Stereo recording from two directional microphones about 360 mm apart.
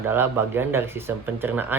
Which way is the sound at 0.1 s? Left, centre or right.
Centre.